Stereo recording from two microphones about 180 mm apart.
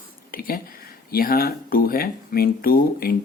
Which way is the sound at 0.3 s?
55° left (ahead or behind).